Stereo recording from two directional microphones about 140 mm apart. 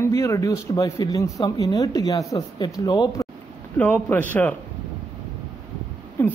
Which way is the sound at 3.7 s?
15° left (ahead or behind).